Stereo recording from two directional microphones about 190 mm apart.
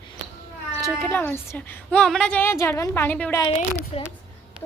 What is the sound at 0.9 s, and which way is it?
A woman's voice, 10° left (ahead or behind).